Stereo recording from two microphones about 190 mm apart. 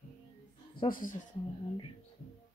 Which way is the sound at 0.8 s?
45° left (ahead or behind).